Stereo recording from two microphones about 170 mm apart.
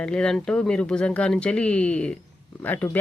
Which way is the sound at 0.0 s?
5° left (ahead or behind).